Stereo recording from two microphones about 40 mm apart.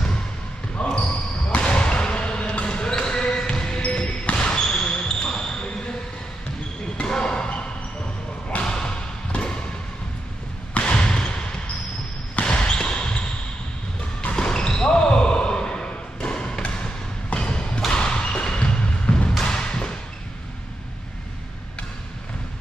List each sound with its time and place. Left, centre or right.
0.7 s basketball bounce: left
7.1 s basketball bounce: left
8.6 s thump: left
10.7 s basketball bounce: left
14.3 s basketball bounce: left
17.3 s thump: left
19.4 s a sound: left